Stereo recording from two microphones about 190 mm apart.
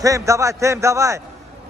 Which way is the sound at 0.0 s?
15° right (ahead or behind).